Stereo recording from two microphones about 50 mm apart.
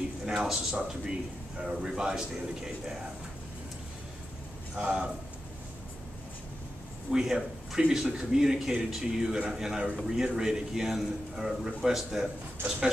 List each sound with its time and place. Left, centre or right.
0.5 s a man's voice: centre
4.7 s a man's voice: right
7.1 s a man's voice: centre